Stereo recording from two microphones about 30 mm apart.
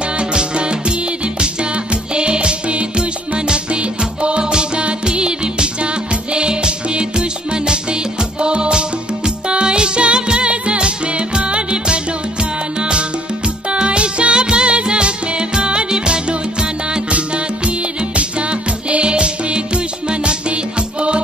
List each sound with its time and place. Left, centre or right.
0.2 s music: right
4.5 s music: right
13.7 s music: right
17.6 s music: right